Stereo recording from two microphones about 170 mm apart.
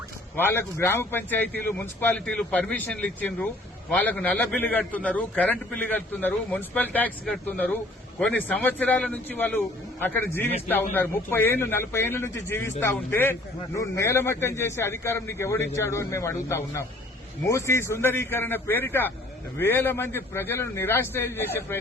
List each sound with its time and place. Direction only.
0.3 s a man's voice: 10° left (ahead or behind)